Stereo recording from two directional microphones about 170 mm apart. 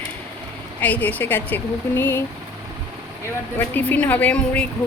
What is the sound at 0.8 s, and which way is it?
Speech, 10° left (ahead or behind).